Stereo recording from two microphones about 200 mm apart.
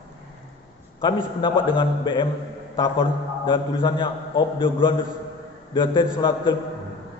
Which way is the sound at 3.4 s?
25° left (ahead or behind).